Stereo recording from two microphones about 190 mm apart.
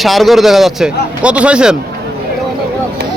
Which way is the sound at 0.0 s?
Centre (ahead or behind).